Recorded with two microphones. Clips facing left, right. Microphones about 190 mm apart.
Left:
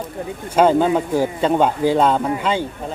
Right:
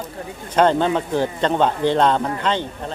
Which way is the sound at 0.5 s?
10° left (ahead or behind).